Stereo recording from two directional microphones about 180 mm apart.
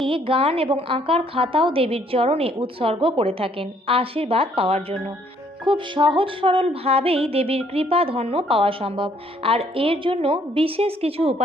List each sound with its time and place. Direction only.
0.0 s music: 30° right (ahead or behind)